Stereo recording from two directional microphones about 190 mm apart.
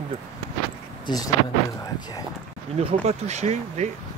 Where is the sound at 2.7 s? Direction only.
35° right (ahead or behind).